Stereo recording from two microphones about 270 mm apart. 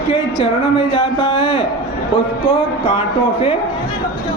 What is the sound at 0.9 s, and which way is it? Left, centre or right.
A man's voice, centre.